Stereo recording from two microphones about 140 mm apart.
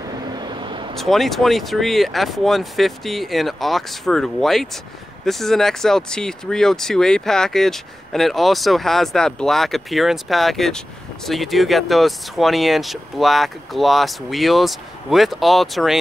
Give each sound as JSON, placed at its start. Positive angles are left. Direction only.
{"t": 0.3, "sound": "vehicle", "side_deg": -30}
{"t": 0.9, "sound": "speech", "side_deg": 0}